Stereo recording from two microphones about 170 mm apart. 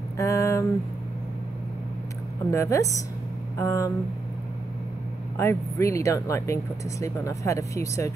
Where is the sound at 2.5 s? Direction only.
20° left (ahead or behind).